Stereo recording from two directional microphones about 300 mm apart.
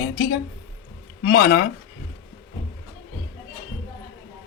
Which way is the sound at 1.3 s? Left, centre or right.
Left.